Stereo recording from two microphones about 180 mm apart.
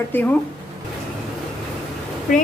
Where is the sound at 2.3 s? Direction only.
50° left (ahead or behind).